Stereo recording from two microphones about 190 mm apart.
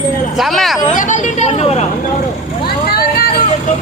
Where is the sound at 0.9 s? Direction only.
40° left (ahead or behind).